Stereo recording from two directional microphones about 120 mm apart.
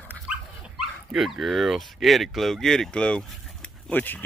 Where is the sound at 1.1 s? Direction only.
Centre (ahead or behind).